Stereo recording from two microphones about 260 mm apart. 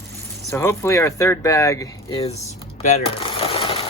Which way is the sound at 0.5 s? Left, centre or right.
Centre.